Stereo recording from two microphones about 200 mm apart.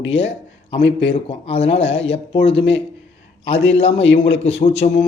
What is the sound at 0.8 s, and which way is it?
Speech, 60° left (ahead or behind).